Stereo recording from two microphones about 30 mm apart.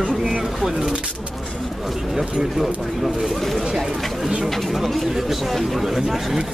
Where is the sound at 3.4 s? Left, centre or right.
Centre.